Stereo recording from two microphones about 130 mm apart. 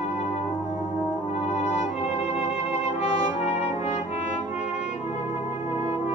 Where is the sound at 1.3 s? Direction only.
55° left (ahead or behind).